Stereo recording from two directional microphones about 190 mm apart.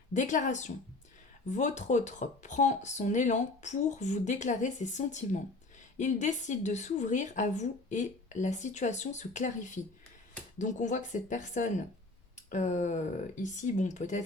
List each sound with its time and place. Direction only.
0.1 s speech: 40° left (ahead or behind)